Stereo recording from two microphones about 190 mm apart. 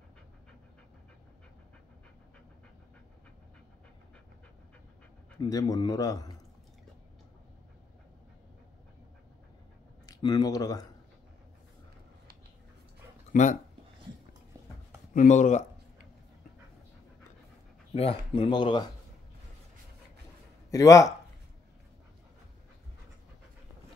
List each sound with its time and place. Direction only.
5.4 s a man's voice: 20° left (ahead or behind)
10.0 s speech: 20° left (ahead or behind)
13.3 s speech: 40° left (ahead or behind)
15.1 s a sound: 40° left (ahead or behind)
17.9 s a man's voice: 30° left (ahead or behind)
20.7 s speech: 15° left (ahead or behind)